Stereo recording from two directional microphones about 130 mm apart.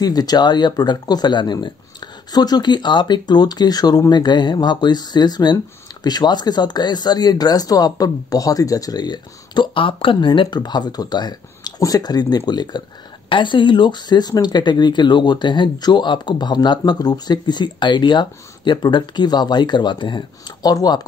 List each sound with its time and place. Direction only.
0.0 s speech: 30° left (ahead or behind)